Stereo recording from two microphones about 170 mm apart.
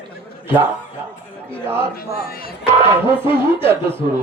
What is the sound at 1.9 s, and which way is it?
Speech, 60° left (ahead or behind).